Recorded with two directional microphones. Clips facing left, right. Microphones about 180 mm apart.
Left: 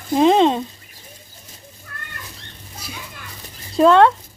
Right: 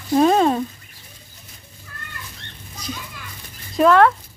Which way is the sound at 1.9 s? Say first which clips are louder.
Left 2 dB; 55° left (ahead or behind).